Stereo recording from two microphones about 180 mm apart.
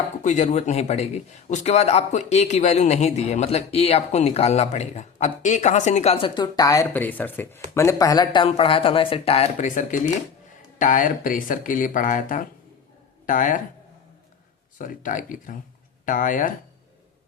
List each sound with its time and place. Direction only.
0.2 s a man's voice: 40° left (ahead or behind)
14.8 s speech: 45° left (ahead or behind)